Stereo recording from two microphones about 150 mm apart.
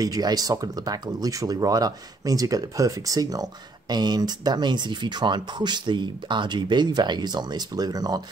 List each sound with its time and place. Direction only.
0.0 s speech: 25° right (ahead or behind)